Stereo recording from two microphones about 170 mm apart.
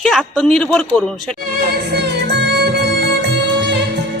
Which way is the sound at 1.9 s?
75° right (ahead or behind).